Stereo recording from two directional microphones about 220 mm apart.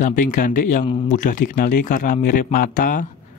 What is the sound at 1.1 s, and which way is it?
Speech, 35° left (ahead or behind).